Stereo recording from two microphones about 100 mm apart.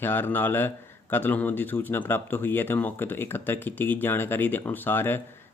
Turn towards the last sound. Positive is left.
turn(degrees=20)  # may be behind; listen again after turning